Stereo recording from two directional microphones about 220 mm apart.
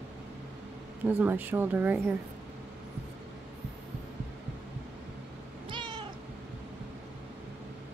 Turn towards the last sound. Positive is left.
turn(degrees=-20)  # may be behind; listen again after turning